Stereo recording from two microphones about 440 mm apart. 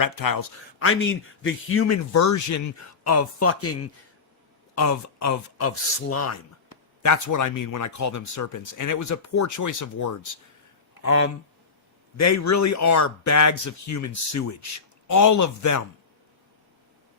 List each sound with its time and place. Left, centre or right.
0.0 s speech: left
0.8 s speech: left
11.0 s speech: left